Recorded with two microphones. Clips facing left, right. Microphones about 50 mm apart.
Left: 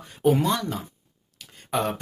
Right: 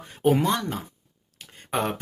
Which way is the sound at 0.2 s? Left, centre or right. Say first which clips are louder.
Even; right.